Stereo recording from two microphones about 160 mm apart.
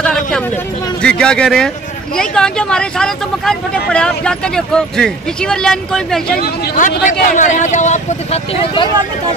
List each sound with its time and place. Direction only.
0.0 s a sound: 5° left (ahead or behind)
1.0 s speech: 5° left (ahead or behind)
6.2 s speech: 80° left
6.8 s speech: 55° left (ahead or behind)